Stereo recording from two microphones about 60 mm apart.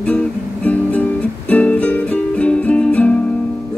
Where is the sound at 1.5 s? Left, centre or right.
Left.